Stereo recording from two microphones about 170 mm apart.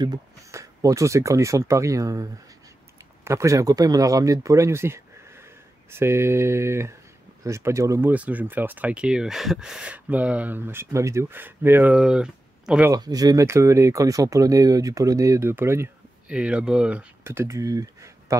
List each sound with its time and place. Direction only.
0.0 s speech: 20° right (ahead or behind)
3.3 s speech: 15° right (ahead or behind)
12.9 s speech: 20° right (ahead or behind)